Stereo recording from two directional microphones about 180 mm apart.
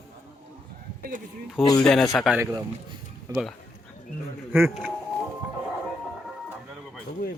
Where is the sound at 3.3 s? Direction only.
20° right (ahead or behind).